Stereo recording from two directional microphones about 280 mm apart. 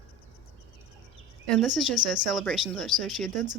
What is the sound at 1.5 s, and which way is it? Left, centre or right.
Speech, centre.